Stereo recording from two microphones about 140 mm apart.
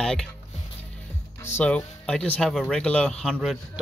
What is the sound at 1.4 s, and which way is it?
Speech, 15° left (ahead or behind).